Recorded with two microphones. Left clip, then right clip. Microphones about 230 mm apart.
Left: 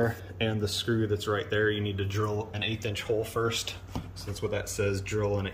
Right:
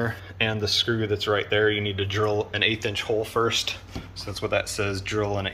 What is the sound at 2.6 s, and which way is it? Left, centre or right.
Speech, centre.